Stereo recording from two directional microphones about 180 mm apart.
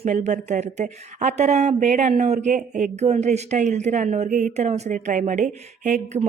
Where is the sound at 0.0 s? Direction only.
40° right (ahead or behind).